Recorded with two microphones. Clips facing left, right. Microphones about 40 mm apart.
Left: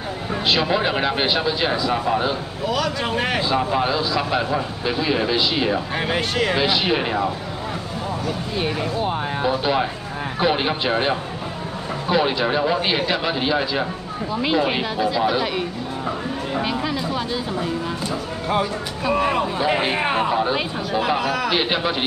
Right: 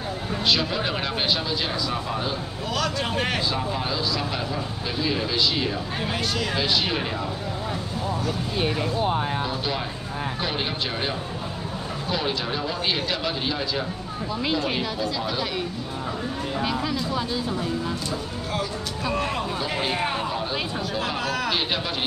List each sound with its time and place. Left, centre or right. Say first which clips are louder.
0.3 s speech: left 4 dB; left
2.6 s speech: left 4 dB; centre
3.4 s speech: left 7 dB; left
5.9 s speech: left 5 dB; left
6.6 s speech: left 5 dB; left
8.3 s speech: left 3 dB; centre
9.4 s speech: left 7 dB; centre
19.0 s speech: left 7 dB; centre
21.5 s speech: left 5 dB; left